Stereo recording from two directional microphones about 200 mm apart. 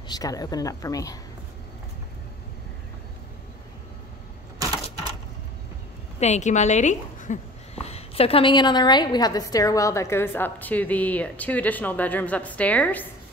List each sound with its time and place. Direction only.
0.1 s speech: 20° left (ahead or behind)
6.1 s speech: 35° left (ahead or behind); by 13.0 s 5° left (ahead or behind)